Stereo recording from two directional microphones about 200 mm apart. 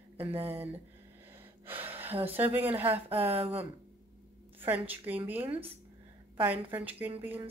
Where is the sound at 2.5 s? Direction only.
10° right (ahead or behind).